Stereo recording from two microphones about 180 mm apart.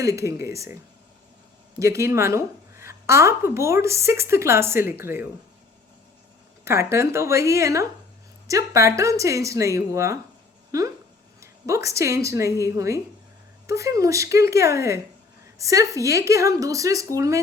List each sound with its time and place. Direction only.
0.0 s a woman's voice: 15° right (ahead or behind)
2.0 s a woman's voice: 15° right (ahead or behind)
6.7 s a woman's voice: 15° right (ahead or behind)